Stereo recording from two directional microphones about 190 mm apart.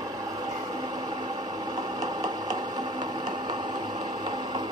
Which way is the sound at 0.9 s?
20° right (ahead or behind).